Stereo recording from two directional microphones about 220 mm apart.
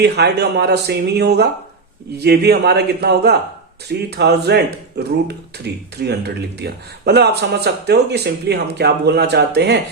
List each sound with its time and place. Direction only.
0.0 s speech: 50° right (ahead or behind)